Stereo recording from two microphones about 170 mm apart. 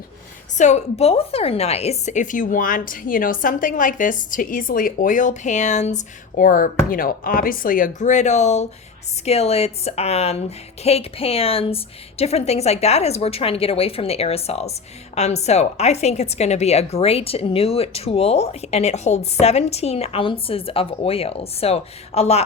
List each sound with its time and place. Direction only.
0.5 s a woman's voice: 45° left (ahead or behind)